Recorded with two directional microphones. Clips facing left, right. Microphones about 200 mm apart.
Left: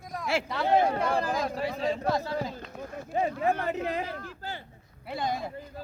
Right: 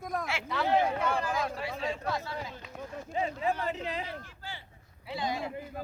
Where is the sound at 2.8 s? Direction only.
55° left (ahead or behind).